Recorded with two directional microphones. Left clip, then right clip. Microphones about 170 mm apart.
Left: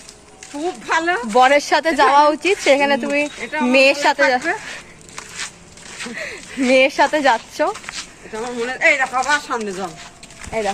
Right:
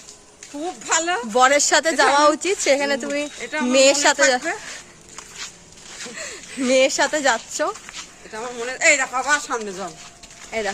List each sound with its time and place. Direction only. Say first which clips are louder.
0.9 s speech: left 3 dB; 15° right (ahead or behind)
6.1 s speech: left 5 dB; 20° right (ahead or behind)
7.9 s a sound: left 6 dB; 80° left
8.3 s speech: left 4 dB; 20° right (ahead or behind)